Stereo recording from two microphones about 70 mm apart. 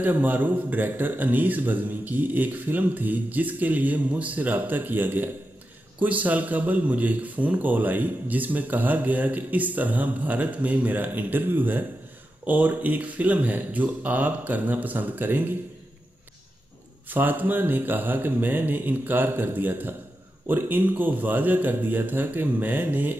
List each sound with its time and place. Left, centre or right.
0.0 s speech: right
17.1 s speech: right